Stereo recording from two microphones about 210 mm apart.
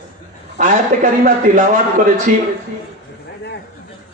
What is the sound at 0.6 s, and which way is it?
A man's voice, 40° right (ahead or behind).